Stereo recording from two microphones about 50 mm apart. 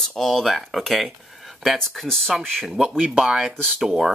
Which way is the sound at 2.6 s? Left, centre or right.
Centre.